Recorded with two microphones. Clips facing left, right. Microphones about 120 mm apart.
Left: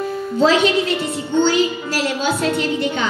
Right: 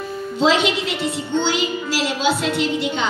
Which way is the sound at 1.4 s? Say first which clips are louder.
Left 5 dB; 50° left (ahead or behind).